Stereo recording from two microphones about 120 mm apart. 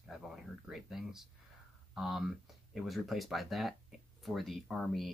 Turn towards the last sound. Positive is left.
turn(degrees=0)  # may be behind; listen again after turning